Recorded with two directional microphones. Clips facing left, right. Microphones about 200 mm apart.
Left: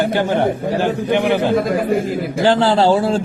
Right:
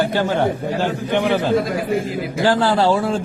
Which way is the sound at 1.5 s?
55° left (ahead or behind).